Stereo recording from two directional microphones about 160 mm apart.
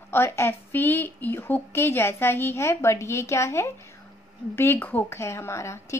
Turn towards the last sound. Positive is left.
turn(degrees=15)  # may be behind; listen again after turning